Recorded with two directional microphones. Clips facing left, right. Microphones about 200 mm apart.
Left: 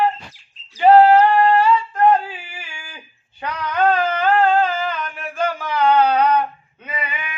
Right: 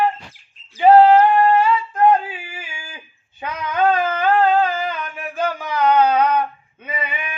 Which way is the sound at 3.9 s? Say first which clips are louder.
Even; 20° right (ahead or behind).